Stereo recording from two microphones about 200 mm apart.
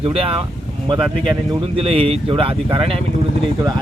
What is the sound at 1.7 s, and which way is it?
Speech, 30° right (ahead or behind).